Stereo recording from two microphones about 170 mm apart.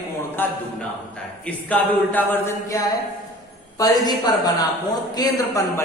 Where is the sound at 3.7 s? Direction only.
20° left (ahead or behind).